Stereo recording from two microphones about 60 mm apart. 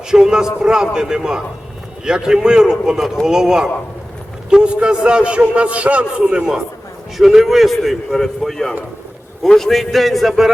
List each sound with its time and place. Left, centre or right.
0.1 s a man's voice: centre